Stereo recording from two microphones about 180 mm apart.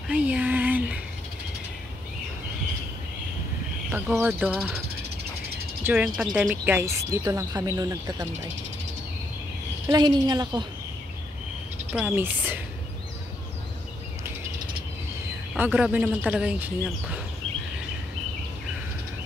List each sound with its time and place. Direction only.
0.1 s a sound: 10° right (ahead or behind)
3.9 s speech: 10° right (ahead or behind)
5.9 s speech: 5° right (ahead or behind)
9.8 s a woman's voice: 20° right (ahead or behind)
11.9 s speech: 10° right (ahead or behind)
15.5 s speech: 10° right (ahead or behind)